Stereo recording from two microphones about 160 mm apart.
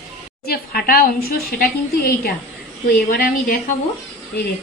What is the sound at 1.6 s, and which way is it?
A woman's voice, 65° left (ahead or behind).